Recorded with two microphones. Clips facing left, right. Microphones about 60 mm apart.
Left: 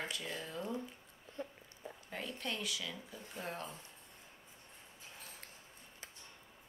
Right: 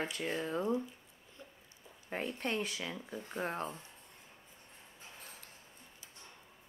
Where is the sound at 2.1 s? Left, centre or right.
Right.